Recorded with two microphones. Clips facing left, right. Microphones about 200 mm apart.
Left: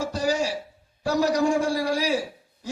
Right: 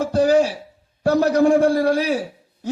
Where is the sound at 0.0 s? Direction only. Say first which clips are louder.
Right 9 dB; 55° right (ahead or behind).